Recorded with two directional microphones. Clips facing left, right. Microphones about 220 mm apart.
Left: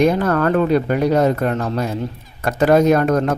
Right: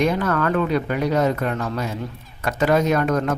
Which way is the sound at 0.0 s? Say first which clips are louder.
Left 5 dB; 40° left (ahead or behind).